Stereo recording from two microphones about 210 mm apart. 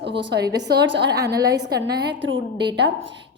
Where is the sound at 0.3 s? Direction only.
55° right (ahead or behind).